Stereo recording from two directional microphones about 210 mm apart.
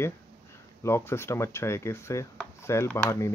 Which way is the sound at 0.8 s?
10° left (ahead or behind).